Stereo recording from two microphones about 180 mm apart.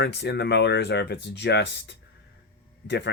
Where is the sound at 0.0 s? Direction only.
65° left (ahead or behind).